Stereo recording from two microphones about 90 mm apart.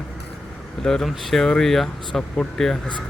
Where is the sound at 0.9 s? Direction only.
5° left (ahead or behind).